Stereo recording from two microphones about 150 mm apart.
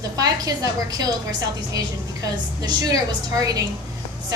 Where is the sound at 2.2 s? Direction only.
25° right (ahead or behind).